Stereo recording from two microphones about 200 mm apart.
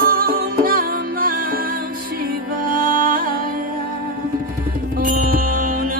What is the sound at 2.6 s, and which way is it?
Music, 45° right (ahead or behind).